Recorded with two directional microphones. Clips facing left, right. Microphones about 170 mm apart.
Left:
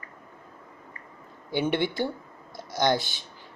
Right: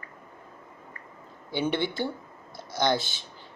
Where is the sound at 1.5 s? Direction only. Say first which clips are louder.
Left 2 dB; 15° left (ahead or behind).